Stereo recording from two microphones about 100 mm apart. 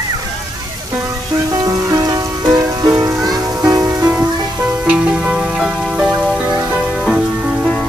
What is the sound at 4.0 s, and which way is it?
Music, 25° right (ahead or behind).